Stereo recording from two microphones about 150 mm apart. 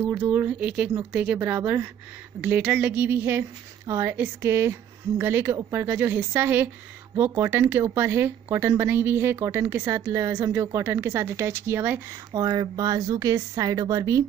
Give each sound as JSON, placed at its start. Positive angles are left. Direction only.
{"t": 0.0, "sound": "speech", "side_deg": -10}
{"t": 12.3, "sound": "a woman's voice", "side_deg": -25}